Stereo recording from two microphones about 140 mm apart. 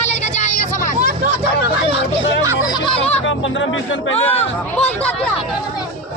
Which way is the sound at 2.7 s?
40° left (ahead or behind).